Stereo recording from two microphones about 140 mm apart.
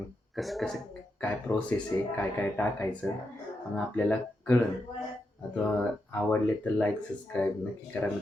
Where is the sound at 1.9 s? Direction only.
20° left (ahead or behind).